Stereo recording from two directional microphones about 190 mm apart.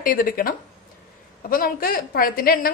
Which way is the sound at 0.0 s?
50° left (ahead or behind).